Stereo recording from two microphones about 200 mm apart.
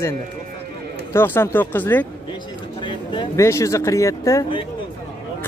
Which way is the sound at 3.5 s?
15° left (ahead or behind).